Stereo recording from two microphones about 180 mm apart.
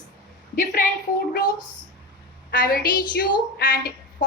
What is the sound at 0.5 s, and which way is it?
Speech, 50° left (ahead or behind).